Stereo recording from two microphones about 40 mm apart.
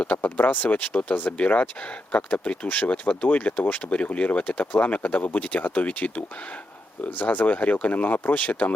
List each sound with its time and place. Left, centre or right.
0.0 s speech: left